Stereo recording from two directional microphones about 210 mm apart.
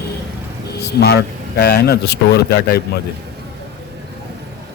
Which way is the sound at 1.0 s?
50° left (ahead or behind).